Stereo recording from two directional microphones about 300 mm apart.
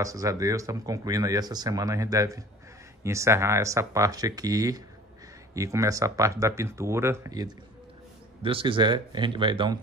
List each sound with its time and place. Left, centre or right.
0.0 s speech: centre